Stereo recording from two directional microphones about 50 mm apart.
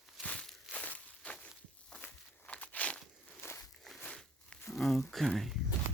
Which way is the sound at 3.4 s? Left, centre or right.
Left.